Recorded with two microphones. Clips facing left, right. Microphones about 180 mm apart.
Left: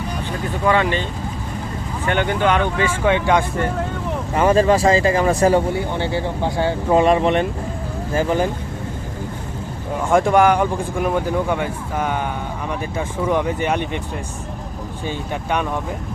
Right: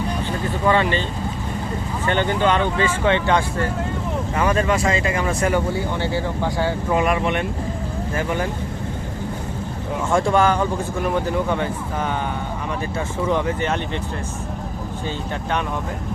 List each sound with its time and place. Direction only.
0.7 s speech: 10° left (ahead or behind)
2.0 s speech: 10° left (ahead or behind)
4.4 s speech: 30° left (ahead or behind)
6.0 s speech: 20° left (ahead or behind)
10.1 s speech: 15° left (ahead or behind)
13.2 s speech: 15° left (ahead or behind)